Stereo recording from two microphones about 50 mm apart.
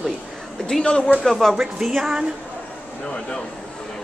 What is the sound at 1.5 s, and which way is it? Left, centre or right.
Speech, centre.